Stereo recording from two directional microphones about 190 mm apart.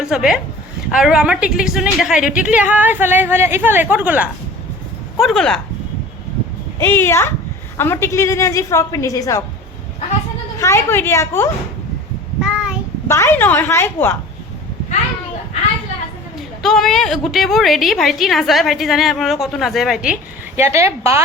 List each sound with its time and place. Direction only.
0.1 s a woman's voice: 5° right (ahead or behind)
6.7 s a woman's voice: 10° left (ahead or behind)
10.6 s a woman's voice: 15° left (ahead or behind)
12.4 s child singing: 5° right (ahead or behind)
13.1 s a woman's voice: 15° left (ahead or behind)
16.6 s a woman's voice: centre (ahead or behind)
20.6 s speech: 15° right (ahead or behind)